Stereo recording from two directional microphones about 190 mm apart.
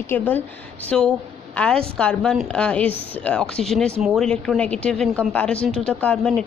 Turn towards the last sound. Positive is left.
turn(degrees=5)  # may be behind; listen again after turning